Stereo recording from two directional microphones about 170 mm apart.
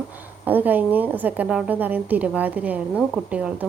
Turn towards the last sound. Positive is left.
turn(degrees=-5)  # may be behind; listen again after turning